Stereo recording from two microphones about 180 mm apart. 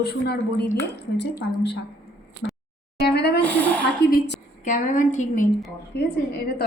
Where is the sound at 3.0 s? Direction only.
65° left (ahead or behind).